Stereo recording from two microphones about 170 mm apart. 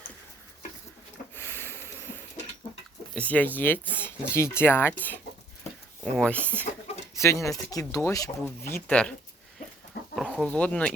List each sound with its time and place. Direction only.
1.5 s a sound: 15° left (ahead or behind)
3.2 s speech: 10° left (ahead or behind)
10.2 s speech: centre (ahead or behind)